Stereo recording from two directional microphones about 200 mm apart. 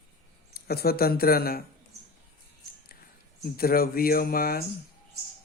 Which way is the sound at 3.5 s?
50° left (ahead or behind).